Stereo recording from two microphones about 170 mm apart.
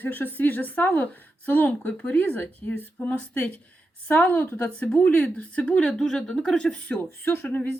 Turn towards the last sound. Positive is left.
turn(degrees=10)  # may be behind; listen again after turning